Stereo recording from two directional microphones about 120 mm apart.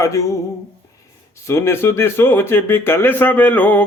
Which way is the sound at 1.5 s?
20° left (ahead or behind).